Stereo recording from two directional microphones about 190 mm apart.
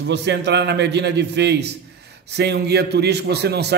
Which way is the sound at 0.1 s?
65° right (ahead or behind).